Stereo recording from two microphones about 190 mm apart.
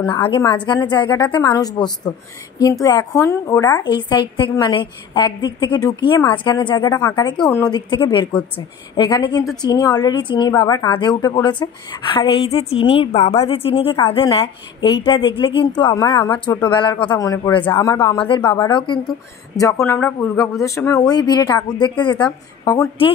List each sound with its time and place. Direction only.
0.4 s a woman's voice: 25° left (ahead or behind)
3.8 s a woman's voice: 25° left (ahead or behind)
18.2 s a woman's voice: 25° left (ahead or behind)